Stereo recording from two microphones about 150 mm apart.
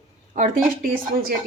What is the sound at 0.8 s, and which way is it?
Speech, 80° right.